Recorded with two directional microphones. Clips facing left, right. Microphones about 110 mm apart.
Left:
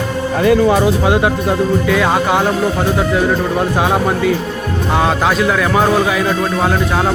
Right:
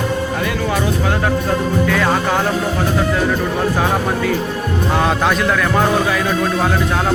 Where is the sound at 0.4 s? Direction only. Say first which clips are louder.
Left 12 dB; 20° left (ahead or behind).